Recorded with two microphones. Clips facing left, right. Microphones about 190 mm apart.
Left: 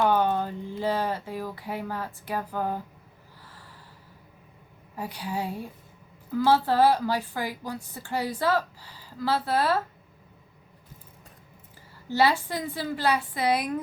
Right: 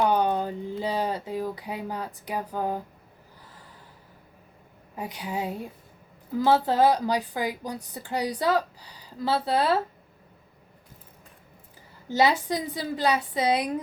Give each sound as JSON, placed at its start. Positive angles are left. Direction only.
{"t": 0.0, "sound": "a sound", "side_deg": -15}
{"t": 4.9, "sound": "a woman's voice", "side_deg": -20}
{"t": 12.1, "sound": "a woman's voice", "side_deg": -20}